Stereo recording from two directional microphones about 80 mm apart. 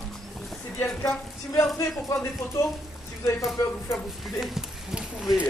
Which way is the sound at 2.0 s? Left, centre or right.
Left.